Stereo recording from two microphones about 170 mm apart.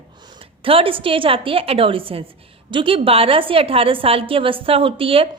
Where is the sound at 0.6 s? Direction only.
30° right (ahead or behind).